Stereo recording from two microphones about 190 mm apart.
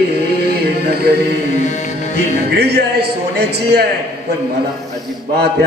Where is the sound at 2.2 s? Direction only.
60° right (ahead or behind).